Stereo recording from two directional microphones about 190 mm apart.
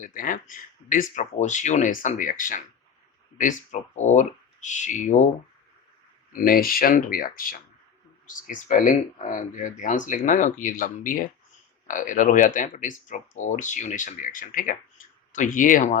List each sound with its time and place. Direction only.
0.0 s speech: 45° left (ahead or behind)
6.3 s speech: 50° left (ahead or behind)